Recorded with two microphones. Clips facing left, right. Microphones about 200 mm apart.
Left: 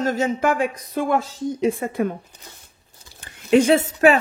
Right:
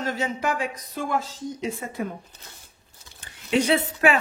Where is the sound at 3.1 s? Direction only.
50° left (ahead or behind).